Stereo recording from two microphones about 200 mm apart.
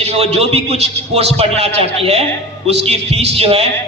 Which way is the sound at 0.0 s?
30° right (ahead or behind).